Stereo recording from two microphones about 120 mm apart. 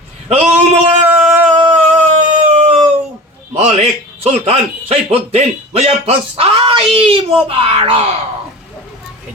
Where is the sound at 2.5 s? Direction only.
60° right (ahead or behind).